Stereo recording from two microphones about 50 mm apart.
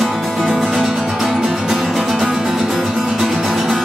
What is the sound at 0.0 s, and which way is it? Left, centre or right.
Music, centre.